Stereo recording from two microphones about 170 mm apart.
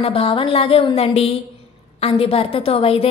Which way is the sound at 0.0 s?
30° left (ahead or behind).